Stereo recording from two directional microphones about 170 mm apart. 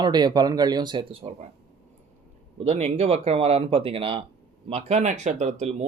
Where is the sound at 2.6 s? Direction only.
40° right (ahead or behind).